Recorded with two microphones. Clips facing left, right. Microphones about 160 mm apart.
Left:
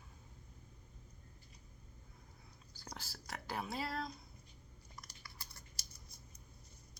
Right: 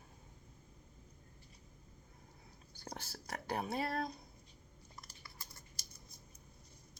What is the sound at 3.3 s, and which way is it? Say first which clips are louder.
Speech: right 4 dB; 50° right (ahead or behind).